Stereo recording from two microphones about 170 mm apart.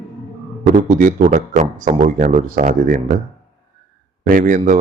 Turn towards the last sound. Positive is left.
turn(degrees=-55)  # may be behind; listen again after turning